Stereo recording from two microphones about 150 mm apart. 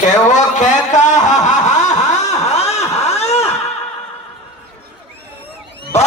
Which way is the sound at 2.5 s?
45° left (ahead or behind).